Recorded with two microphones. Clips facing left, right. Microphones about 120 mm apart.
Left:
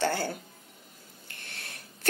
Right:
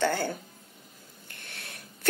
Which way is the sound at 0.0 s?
55° right (ahead or behind).